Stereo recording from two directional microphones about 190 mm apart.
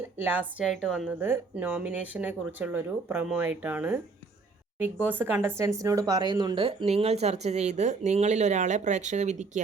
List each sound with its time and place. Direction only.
0.2 s a woman's voice: 10° right (ahead or behind)
5.0 s speech: 10° right (ahead or behind); by 9.5 s 40° right (ahead or behind)